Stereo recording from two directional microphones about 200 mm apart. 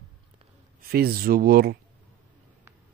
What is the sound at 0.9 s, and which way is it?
Speech, 50° right (ahead or behind).